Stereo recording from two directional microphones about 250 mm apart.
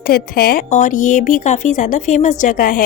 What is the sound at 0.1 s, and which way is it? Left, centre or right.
A woman's voice, left.